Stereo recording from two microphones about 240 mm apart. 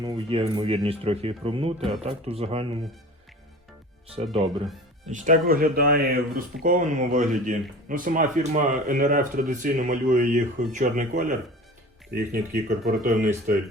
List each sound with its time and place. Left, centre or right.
0.0 s speech: right
4.1 s speech: right